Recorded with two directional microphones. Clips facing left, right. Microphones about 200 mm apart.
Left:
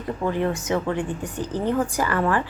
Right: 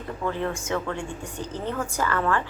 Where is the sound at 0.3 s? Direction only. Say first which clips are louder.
Left 4 dB; 15° left (ahead or behind).